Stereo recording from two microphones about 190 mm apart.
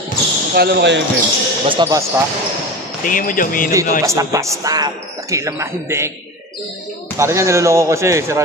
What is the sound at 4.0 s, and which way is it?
Speech, 15° right (ahead or behind).